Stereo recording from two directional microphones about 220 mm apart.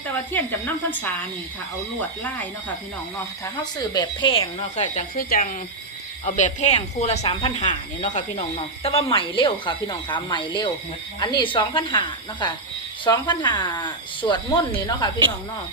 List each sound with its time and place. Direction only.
0.3 s speech: 10° left (ahead or behind)
3.4 s speech: 15° left (ahead or behind)